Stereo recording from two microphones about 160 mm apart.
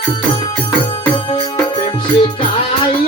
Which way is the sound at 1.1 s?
30° left (ahead or behind).